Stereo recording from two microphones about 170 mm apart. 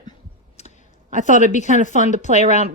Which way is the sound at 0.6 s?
40° left (ahead or behind).